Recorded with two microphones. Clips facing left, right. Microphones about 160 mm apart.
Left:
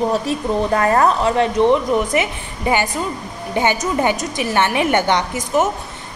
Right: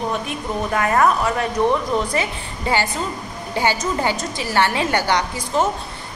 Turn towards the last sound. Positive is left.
turn(degrees=20)  # may be behind; listen again after turning